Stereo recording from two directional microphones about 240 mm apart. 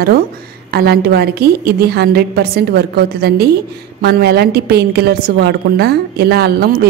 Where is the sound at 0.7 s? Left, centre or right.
Right.